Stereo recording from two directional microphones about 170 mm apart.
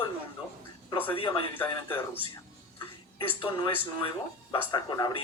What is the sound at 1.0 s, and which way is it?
Speech, 30° left (ahead or behind).